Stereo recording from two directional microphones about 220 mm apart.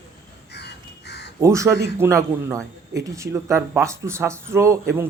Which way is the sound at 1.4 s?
15° right (ahead or behind).